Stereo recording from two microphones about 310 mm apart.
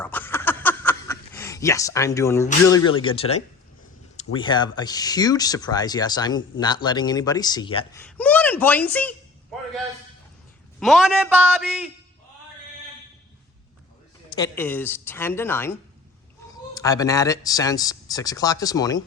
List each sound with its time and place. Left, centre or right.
0.0 s a sound: centre
2.6 s speech: centre
8.0 s a sound: centre
10.8 s a man's voice: centre
14.3 s speech: centre
16.7 s speech: centre